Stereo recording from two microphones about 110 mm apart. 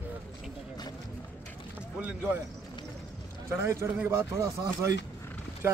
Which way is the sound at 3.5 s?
20° right (ahead or behind).